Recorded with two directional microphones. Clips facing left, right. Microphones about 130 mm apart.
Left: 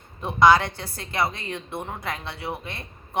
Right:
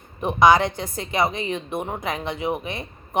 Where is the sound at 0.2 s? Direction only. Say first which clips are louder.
Right 2 dB; 20° right (ahead or behind).